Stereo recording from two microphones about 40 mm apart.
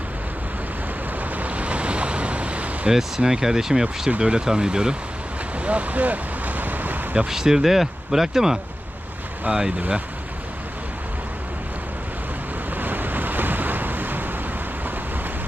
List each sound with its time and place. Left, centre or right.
1.2 s ocean: right
3.2 s speech: centre
5.5 s ocean: right
7.3 s speech: centre
12.7 s waves: right